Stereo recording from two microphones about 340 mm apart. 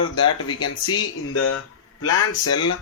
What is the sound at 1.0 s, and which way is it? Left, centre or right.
Speech, left.